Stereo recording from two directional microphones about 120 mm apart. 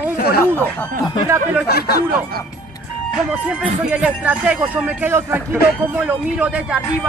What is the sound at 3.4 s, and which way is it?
Speech, 10° right (ahead or behind).